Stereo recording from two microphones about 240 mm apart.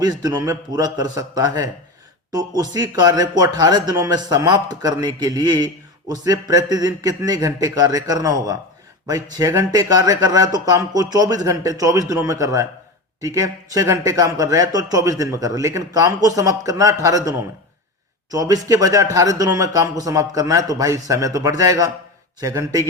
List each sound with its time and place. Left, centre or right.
0.0 s speech: centre